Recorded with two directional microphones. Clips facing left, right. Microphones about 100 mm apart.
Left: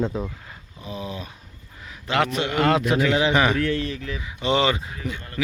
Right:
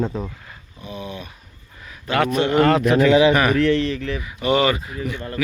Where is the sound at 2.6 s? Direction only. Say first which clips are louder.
Right 3 dB; 15° left (ahead or behind).